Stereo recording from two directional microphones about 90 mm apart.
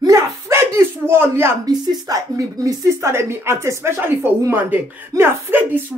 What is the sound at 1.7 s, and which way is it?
A woman's voice, 50° right (ahead or behind).